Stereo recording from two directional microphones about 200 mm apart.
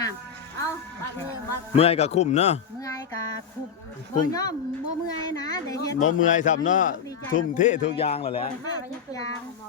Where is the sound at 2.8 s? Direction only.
15° left (ahead or behind).